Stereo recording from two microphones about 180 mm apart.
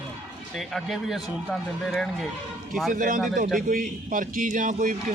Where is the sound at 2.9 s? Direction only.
50° right (ahead or behind).